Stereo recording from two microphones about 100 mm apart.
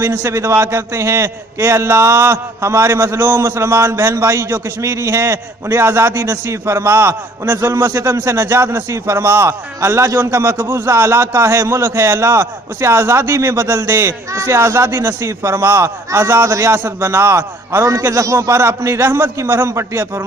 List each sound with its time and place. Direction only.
0.0 s a man's voice: 25° right (ahead or behind)